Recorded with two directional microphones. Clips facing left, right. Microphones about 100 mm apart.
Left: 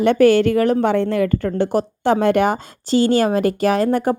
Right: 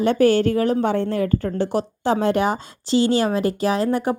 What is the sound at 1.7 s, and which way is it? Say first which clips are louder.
A woman's voice: left 4 dB; 50° left (ahead or behind).